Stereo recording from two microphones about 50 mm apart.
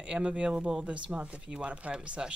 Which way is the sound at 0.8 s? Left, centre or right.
Right.